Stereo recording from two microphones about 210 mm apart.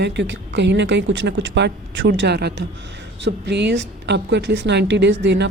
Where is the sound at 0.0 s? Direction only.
55° right (ahead or behind).